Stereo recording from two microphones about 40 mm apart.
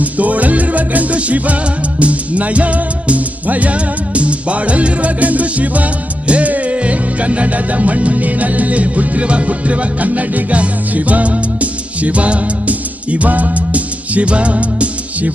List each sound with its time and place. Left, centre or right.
0.0 s music: right